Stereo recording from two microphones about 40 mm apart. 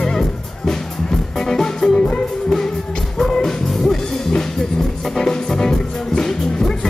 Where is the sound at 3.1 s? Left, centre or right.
Centre.